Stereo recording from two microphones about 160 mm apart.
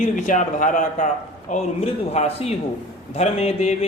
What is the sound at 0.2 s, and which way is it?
A man's voice, 50° left (ahead or behind).